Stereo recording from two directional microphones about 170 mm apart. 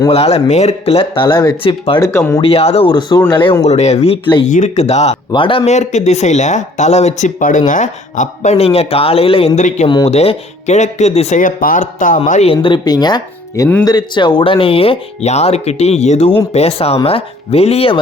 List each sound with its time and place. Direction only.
0.1 s speech: 35° left (ahead or behind)
2.0 s speech: 15° left (ahead or behind)
2.4 s speech: 35° left (ahead or behind)
3.6 s speech: 40° left (ahead or behind)
4.4 s speech: 45° left (ahead or behind)
12.5 s speech: 30° left (ahead or behind)